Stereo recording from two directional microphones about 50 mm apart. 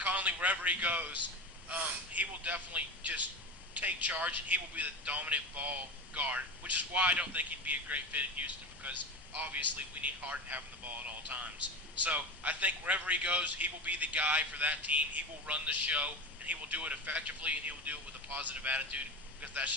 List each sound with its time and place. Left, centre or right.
0.0 s a man's voice: right